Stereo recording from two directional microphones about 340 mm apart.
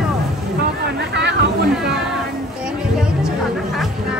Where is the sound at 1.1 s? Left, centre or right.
Right.